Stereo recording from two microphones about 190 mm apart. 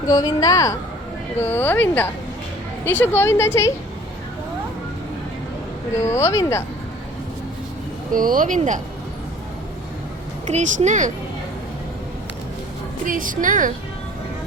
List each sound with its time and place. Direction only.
0.1 s speech: 20° left (ahead or behind)
6.0 s speech: 15° left (ahead or behind)
8.1 s speech: 45° right (ahead or behind)
10.4 s speech: 40° right (ahead or behind)
13.1 s speech: 45° right (ahead or behind)